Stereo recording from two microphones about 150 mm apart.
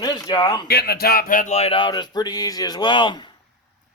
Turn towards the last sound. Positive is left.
turn(degrees=30)  # may be behind; listen again after turning